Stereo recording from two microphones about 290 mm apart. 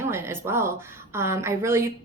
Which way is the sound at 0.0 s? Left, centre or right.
Centre.